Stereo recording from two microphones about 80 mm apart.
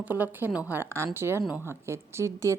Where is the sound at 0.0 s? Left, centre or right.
Right.